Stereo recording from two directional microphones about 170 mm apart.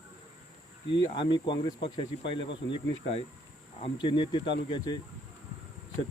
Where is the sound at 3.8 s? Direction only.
30° left (ahead or behind).